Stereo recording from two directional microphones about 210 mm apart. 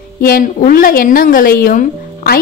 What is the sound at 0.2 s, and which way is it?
A woman's voice, 40° left (ahead or behind).